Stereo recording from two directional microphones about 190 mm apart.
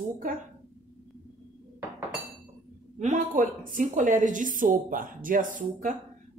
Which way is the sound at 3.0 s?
40° right (ahead or behind).